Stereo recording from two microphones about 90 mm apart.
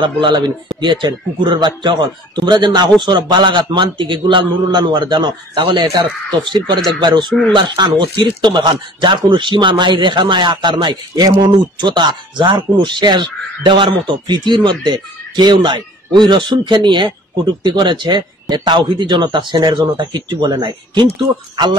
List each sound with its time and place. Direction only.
0.0 s speech: 60° right (ahead or behind)